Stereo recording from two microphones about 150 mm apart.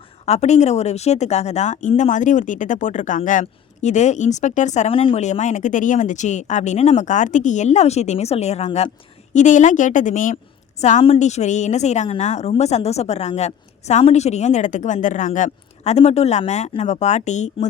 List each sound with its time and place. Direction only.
0.3 s a woman's voice: 50° left (ahead or behind)
4.9 s speech: 35° left (ahead or behind)
5.2 s a woman's voice: 50° left (ahead or behind)